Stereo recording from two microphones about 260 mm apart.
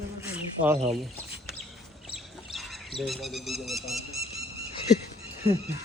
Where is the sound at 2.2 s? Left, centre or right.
Centre.